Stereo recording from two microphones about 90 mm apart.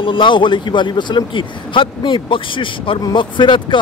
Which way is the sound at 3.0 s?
60° left (ahead or behind).